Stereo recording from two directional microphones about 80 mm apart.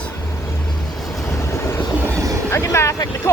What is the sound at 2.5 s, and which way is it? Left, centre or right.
Vehicle, left.